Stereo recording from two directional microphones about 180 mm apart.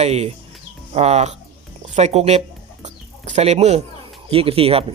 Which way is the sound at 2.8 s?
40° right (ahead or behind).